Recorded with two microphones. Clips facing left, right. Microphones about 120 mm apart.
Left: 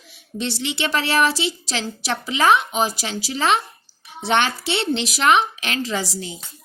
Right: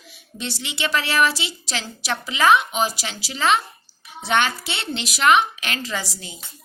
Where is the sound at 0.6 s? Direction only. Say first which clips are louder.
Even; 50° left (ahead or behind).